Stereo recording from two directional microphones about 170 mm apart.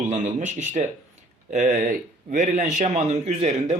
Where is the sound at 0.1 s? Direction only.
45° right (ahead or behind).